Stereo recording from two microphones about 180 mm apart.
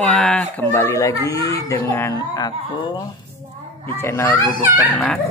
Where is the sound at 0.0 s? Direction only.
5° left (ahead or behind); by 3.0 s 25° left (ahead or behind).